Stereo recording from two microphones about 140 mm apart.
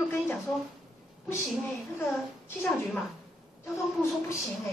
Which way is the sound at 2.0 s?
15° left (ahead or behind).